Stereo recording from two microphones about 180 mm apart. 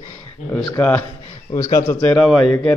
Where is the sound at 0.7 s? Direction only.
10° left (ahead or behind).